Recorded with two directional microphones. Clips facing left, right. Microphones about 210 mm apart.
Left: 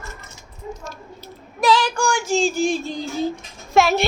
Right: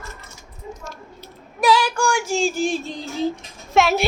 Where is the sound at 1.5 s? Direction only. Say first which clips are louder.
Even; 10° right (ahead or behind).